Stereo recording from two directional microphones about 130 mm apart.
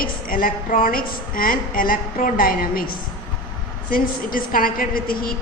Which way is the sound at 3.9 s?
90° left.